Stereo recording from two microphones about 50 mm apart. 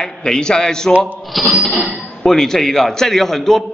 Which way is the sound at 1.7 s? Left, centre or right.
Centre.